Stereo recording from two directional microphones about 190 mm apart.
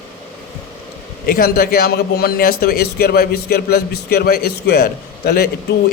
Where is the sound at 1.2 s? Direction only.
50° left (ahead or behind).